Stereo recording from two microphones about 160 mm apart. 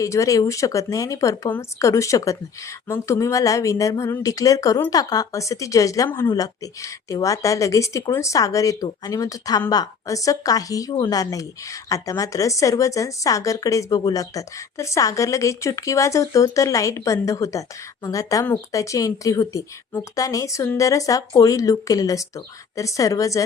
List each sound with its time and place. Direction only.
0.0 s speech: 20° left (ahead or behind)